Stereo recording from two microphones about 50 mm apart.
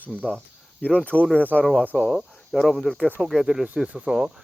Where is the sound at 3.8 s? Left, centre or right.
Right.